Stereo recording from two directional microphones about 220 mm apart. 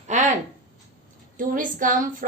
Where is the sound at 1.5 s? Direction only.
35° right (ahead or behind).